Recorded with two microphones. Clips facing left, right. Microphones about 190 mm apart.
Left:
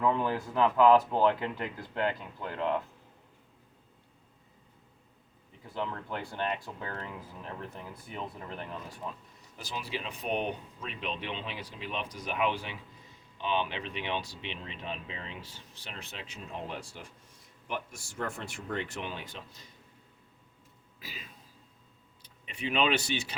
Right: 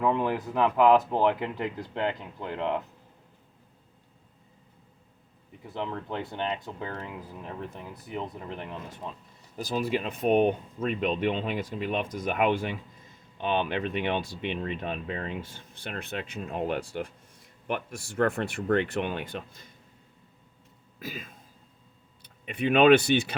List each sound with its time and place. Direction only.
0.0 s speech: 15° right (ahead or behind)
5.6 s speech: 20° right (ahead or behind)
9.6 s speech: 45° right (ahead or behind)
21.0 s speech: 50° right (ahead or behind)